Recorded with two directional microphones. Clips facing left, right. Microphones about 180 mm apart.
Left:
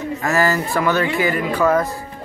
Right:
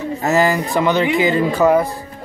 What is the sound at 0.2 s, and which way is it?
Speech, 20° right (ahead or behind).